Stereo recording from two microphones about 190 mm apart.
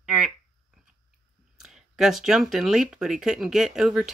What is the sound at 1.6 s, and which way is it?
Speech, centre (ahead or behind).